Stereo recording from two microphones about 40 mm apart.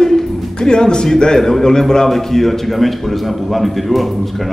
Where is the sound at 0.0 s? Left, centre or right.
Centre.